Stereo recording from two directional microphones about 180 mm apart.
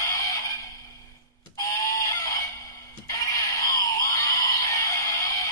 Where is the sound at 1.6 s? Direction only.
20° left (ahead or behind).